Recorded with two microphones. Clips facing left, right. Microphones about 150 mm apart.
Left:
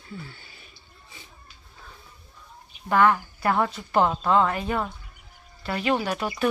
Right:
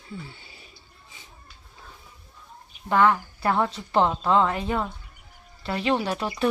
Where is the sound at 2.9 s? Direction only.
20° right (ahead or behind).